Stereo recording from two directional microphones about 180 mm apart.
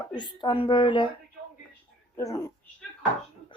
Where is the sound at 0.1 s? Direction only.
25° left (ahead or behind).